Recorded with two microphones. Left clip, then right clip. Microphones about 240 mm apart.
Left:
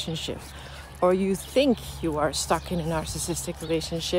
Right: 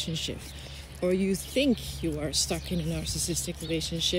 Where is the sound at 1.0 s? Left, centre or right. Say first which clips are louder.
Left 5 dB; centre.